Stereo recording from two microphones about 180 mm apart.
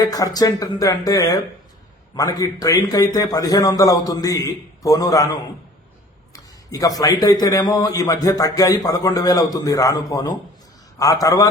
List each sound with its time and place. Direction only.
0.0 s a man's voice: 20° left (ahead or behind)